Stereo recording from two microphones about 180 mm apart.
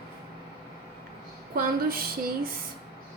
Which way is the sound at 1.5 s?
55° right (ahead or behind).